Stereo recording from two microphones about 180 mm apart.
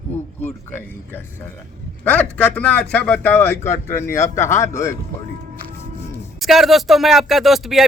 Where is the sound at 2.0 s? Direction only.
10° left (ahead or behind).